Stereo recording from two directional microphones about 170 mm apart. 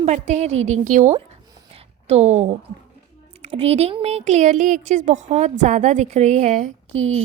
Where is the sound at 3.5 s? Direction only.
35° right (ahead or behind).